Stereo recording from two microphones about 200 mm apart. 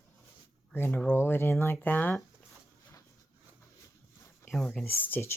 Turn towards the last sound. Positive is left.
turn(degrees=10)  # may be behind; listen again after turning